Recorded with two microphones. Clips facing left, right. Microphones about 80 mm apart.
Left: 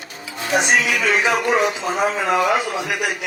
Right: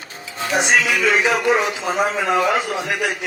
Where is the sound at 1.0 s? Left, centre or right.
Left.